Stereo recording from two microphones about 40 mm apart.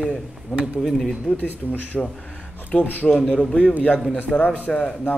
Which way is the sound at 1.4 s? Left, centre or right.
Left.